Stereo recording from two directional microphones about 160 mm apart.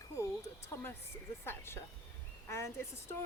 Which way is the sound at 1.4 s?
15° left (ahead or behind).